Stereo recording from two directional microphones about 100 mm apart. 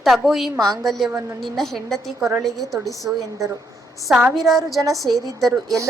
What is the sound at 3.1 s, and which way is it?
Speech, 20° right (ahead or behind).